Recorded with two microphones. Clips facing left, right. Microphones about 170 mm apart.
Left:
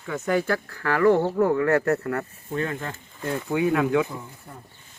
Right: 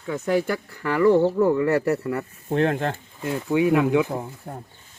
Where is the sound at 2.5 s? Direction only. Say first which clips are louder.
Right 7 dB; 70° right (ahead or behind).